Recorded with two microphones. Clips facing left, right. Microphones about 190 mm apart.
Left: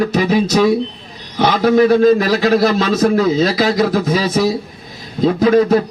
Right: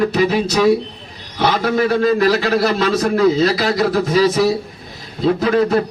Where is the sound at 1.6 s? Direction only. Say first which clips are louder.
Left 8 dB; 40° left (ahead or behind).